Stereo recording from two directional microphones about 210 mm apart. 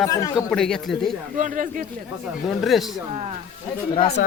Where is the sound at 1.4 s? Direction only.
40° right (ahead or behind).